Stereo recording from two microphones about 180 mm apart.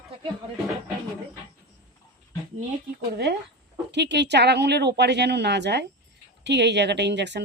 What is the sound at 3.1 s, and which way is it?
Speech, 65° right (ahead or behind).